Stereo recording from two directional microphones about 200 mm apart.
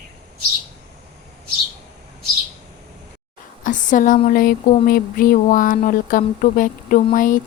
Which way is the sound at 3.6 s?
40° left (ahead or behind).